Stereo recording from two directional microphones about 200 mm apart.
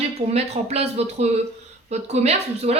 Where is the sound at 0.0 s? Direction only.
30° right (ahead or behind).